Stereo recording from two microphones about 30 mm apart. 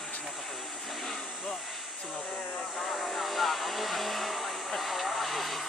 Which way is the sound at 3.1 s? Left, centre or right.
Centre.